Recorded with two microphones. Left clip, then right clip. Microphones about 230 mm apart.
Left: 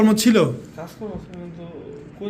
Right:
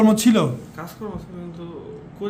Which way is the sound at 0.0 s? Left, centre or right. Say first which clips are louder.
Left 1 dB; centre.